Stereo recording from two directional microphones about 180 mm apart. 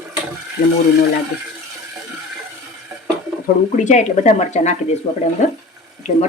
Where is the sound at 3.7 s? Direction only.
40° left (ahead or behind).